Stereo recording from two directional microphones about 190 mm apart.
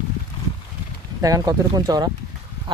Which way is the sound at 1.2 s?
20° right (ahead or behind).